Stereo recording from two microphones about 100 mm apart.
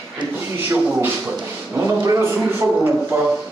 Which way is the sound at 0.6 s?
20° right (ahead or behind).